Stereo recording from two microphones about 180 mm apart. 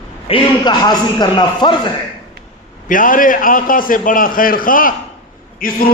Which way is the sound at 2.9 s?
50° left (ahead or behind).